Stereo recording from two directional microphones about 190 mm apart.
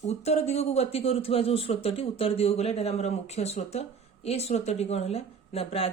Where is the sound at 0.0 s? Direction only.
35° left (ahead or behind).